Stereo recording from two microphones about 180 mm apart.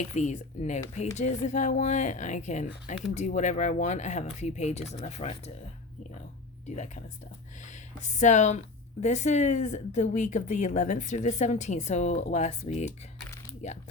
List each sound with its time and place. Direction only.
0.0 s speech: 40° left (ahead or behind)
6.7 s speech: 40° left (ahead or behind)